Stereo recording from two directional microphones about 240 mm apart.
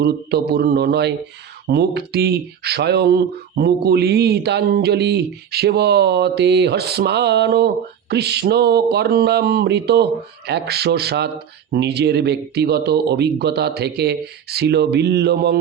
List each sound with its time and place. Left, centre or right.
0.0 s speech: right